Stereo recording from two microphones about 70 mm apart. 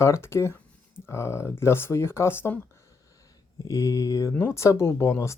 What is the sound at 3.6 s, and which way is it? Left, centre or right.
Speech, left.